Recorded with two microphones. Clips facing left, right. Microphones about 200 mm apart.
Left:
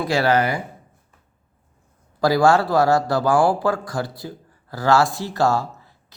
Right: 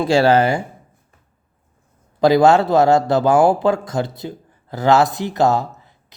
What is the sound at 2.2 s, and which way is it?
A man's voice, 20° right (ahead or behind).